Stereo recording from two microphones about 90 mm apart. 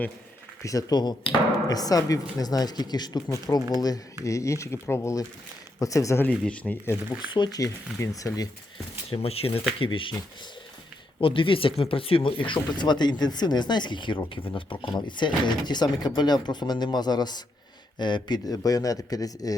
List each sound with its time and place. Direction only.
0.6 s speech: 40° left (ahead or behind)
6.4 s speech: 15° left (ahead or behind)
6.8 s speech: 30° left (ahead or behind)
7.3 s speech: 60° left (ahead or behind)
7.9 s speech: 35° left (ahead or behind)
9.0 s speech: 90° left
11.2 s speech: 80° left; by 19.5 s 45° left (ahead or behind)